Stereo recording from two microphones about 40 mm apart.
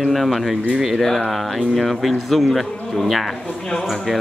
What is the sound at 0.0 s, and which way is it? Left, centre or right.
Speech, centre.